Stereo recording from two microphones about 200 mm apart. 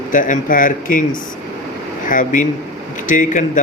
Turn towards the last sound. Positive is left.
turn(degrees=40)  # may be behind; listen again after turning